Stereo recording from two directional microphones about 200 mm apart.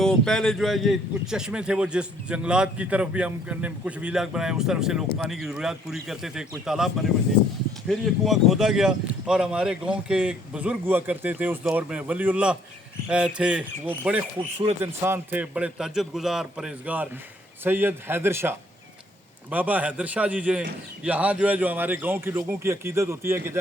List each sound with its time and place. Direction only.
0.0 s a man's voice: 5° left (ahead or behind); by 23.6 s 10° right (ahead or behind)